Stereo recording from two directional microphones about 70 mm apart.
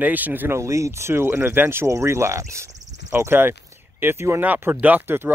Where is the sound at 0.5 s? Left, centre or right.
Right.